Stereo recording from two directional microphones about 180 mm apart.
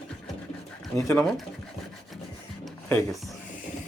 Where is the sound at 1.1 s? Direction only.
5° left (ahead or behind).